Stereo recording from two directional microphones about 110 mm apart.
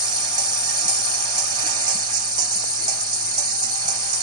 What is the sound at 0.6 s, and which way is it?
Music, 40° right (ahead or behind).